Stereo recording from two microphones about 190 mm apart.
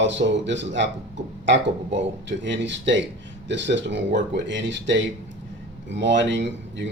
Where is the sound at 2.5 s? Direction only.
70° right (ahead or behind).